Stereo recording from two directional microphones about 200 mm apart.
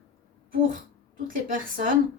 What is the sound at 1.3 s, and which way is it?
Speech, 45° right (ahead or behind).